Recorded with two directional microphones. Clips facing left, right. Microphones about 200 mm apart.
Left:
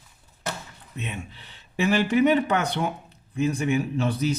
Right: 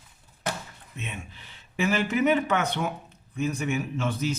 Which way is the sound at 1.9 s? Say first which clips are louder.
Left 4 dB; 35° left (ahead or behind).